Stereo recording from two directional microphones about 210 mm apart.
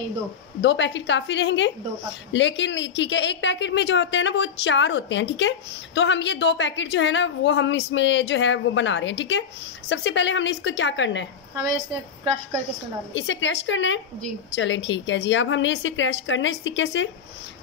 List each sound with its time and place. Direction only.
0.6 s speech: 60° left (ahead or behind)
13.1 s speech: 60° left (ahead or behind)